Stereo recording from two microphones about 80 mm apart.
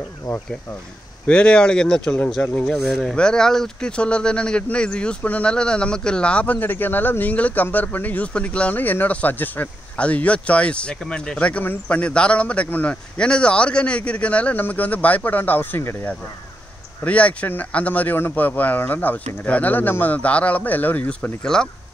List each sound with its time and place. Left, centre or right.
1.2 s speech: centre; by 16.1 s left
17.0 s speech: centre